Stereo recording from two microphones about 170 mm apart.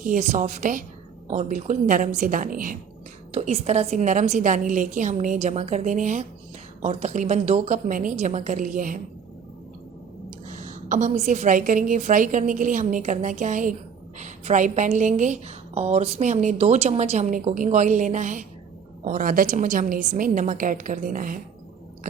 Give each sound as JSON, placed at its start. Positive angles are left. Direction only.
{"t": 0.0, "sound": "a woman's voice", "side_deg": -45}
{"t": 3.3, "sound": "a woman's voice", "side_deg": -35}
{"t": 10.5, "sound": "a woman's voice", "side_deg": -45}